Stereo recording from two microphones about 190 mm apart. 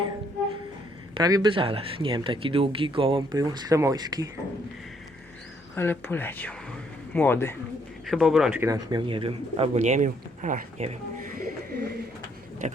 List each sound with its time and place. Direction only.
1.1 s speech: 20° right (ahead or behind)
5.7 s speech: 10° left (ahead or behind)
8.0 s a man's voice: centre (ahead or behind)
8.7 s speech: 25° right (ahead or behind); by 11.3 s 40° right (ahead or behind)
11.3 s bird: 55° right (ahead or behind)
12.6 s speech: 40° right (ahead or behind)